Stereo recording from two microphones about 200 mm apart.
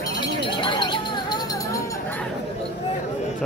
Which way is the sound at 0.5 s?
25° left (ahead or behind).